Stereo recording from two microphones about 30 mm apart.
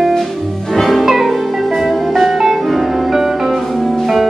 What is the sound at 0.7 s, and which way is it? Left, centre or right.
Music, centre.